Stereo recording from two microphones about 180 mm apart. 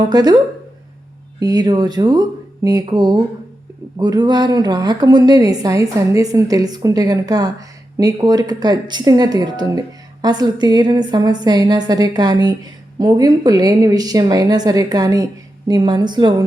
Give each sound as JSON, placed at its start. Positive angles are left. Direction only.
{"t": 0.1, "sound": "speech", "side_deg": -20}
{"t": 1.4, "sound": "speech", "side_deg": -20}